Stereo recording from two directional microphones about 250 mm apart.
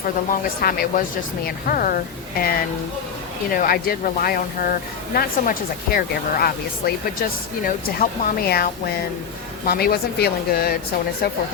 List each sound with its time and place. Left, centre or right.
0.6 s speech: left
9.6 s speech: left